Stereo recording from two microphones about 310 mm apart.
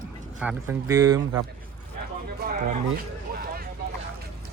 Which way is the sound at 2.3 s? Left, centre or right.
Right.